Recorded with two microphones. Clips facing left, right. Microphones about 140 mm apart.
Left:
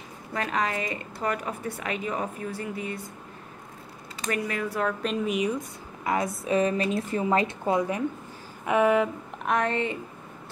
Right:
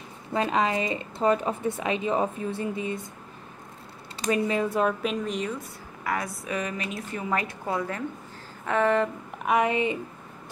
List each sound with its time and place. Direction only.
0.3 s a woman's voice: 25° right (ahead or behind)
4.3 s a woman's voice: 20° right (ahead or behind)
5.2 s speech: 10° left (ahead or behind)
6.0 s a woman's voice: 20° left (ahead or behind)
9.5 s speech: 10° right (ahead or behind)